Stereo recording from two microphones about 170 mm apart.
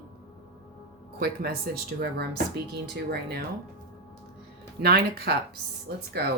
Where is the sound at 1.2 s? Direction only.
65° right (ahead or behind).